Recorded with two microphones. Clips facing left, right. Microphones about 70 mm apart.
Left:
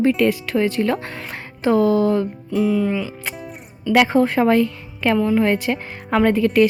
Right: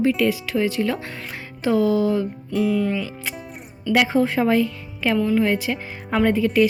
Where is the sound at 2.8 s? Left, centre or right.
Centre.